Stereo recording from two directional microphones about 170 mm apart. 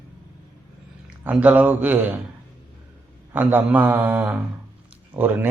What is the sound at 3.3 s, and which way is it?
A man's voice, 10° right (ahead or behind).